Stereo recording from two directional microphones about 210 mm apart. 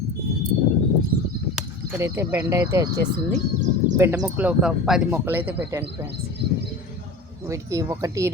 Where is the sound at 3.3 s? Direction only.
35° right (ahead or behind).